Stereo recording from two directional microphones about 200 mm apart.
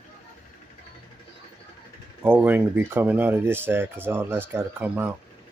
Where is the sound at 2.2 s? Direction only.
10° right (ahead or behind).